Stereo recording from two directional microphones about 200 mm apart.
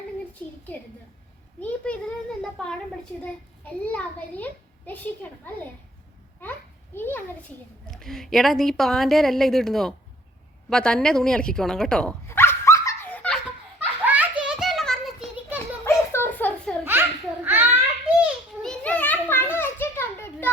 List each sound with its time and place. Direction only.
1.6 s a sound: 5° left (ahead or behind)
3.2 s a child's voice: 10° left (ahead or behind)
6.9 s children playing: 10° left (ahead or behind)
7.9 s speech: centre (ahead or behind)
10.7 s dog: 5° left (ahead or behind)
13.7 s a sound: 10° right (ahead or behind)
15.5 s children playing: 10° left (ahead or behind)
16.8 s babbling: 10° right (ahead or behind)
18.2 s children playing: 5° left (ahead or behind)